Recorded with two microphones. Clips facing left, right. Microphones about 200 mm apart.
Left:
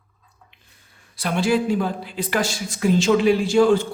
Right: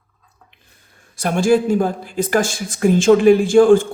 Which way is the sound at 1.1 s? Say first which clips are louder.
Right 5 dB; 45° right (ahead or behind).